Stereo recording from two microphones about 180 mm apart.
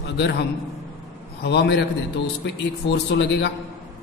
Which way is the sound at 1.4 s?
70° left (ahead or behind).